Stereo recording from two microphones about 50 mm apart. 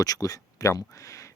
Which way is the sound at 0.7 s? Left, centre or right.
Left.